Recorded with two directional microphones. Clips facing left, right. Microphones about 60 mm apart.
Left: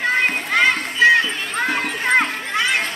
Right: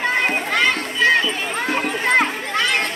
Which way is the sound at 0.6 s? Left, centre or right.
Centre.